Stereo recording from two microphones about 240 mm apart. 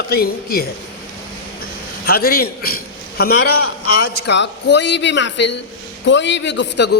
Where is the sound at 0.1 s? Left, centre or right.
Left.